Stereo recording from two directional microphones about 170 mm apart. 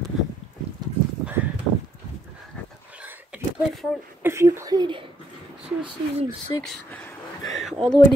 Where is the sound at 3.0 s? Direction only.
5° right (ahead or behind); by 5.0 s 25° right (ahead or behind).